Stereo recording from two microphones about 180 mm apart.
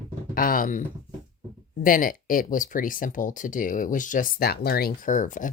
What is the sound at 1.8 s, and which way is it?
Speech, 50° left (ahead or behind).